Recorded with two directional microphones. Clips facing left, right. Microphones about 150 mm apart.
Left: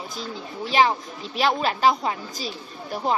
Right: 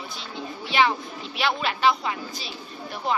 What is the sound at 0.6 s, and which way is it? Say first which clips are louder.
Speech: left 2 dB; 40° left (ahead or behind).